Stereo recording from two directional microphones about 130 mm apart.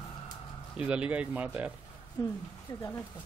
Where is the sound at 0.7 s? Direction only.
10° right (ahead or behind).